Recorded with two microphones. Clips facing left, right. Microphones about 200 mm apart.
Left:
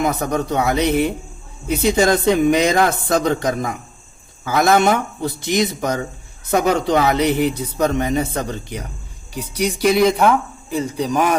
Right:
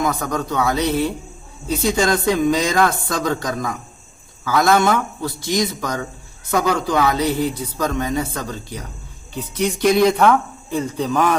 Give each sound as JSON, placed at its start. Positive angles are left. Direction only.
{"t": 0.0, "sound": "speech", "side_deg": 20}
{"t": 9.6, "sound": "a man's voice", "side_deg": 10}